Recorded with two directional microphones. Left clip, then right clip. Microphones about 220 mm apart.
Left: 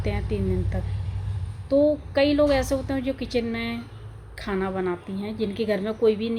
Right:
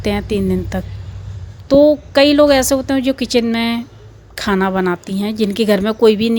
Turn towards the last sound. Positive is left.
turn(degrees=-50)  # may be behind; listen again after turning